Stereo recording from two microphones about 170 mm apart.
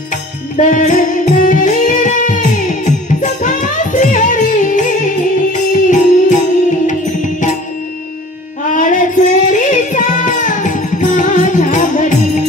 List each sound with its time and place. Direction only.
0.1 s music: 50° left (ahead or behind)
8.7 s music: 50° left (ahead or behind)